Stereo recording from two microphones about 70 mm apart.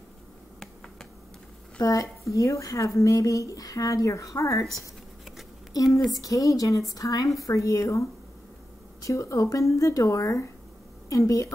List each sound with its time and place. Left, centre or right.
1.8 s speech: left
5.9 s speech: centre
6.1 s a woman's voice: left